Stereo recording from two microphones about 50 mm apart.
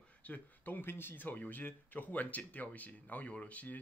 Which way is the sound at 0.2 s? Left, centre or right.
Left.